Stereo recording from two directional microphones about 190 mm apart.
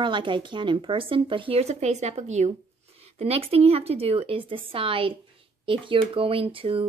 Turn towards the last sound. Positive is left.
turn(degrees=-30)  # may be behind; listen again after turning